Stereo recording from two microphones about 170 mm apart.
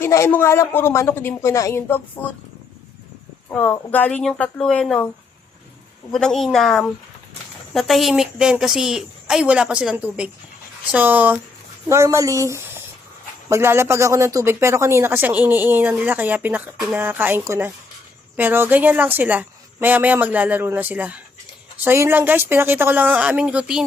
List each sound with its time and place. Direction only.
0.0 s a woman's voice: 15° left (ahead or behind)
3.5 s a woman's voice: 10° left (ahead or behind)
6.1 s a woman's voice: 5° left (ahead or behind)